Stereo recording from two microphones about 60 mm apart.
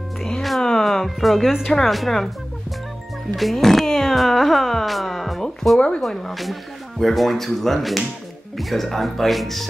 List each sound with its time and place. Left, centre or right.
0.2 s music: centre
1.7 s speech: centre
3.3 s speech: centre